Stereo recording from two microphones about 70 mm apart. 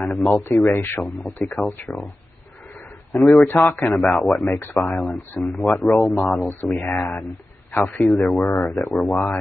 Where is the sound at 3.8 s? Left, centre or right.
Centre.